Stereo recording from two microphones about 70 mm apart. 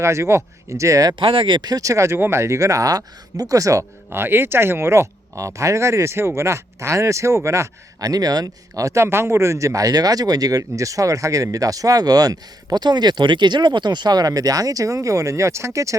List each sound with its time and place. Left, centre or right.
0.0 s speech: right
2.1 s speech: right
4.1 s speech: right